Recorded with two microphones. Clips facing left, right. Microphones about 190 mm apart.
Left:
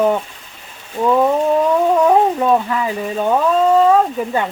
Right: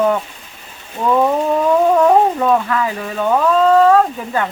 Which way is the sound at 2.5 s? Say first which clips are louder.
Even; 20° left (ahead or behind).